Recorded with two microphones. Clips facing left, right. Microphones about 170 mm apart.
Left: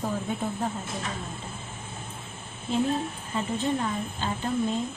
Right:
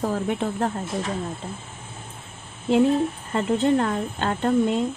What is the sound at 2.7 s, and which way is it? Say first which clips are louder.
Speech: right 8 dB; 70° right (ahead or behind).